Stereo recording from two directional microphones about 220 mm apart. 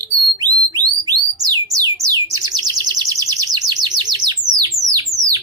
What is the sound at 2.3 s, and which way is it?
Chirp, 20° right (ahead or behind).